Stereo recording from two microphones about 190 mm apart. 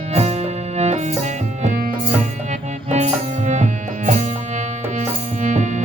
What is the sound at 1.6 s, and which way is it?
Music, 40° right (ahead or behind).